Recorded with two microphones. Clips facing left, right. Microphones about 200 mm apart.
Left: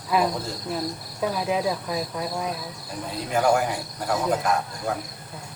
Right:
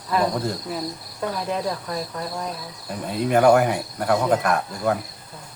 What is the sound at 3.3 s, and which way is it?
Cricket, 60° right (ahead or behind).